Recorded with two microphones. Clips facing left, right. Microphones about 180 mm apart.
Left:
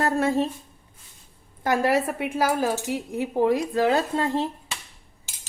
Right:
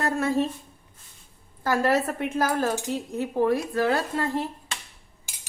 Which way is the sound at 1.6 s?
15° left (ahead or behind).